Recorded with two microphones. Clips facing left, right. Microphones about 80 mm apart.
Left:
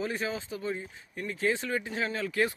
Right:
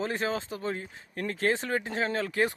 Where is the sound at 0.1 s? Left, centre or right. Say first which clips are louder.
Right 3 dB; right.